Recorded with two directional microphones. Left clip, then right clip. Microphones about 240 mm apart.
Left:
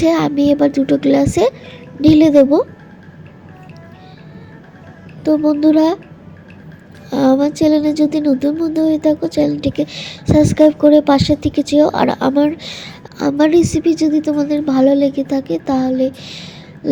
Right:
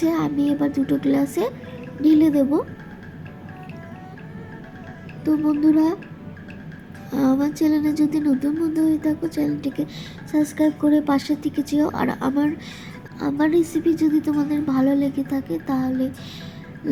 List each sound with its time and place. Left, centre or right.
0.0 s speech: left
5.5 s speech: left
7.1 s speech: left